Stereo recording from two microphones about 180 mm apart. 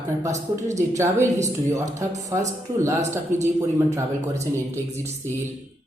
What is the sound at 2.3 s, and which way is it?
Speech, 15° right (ahead or behind).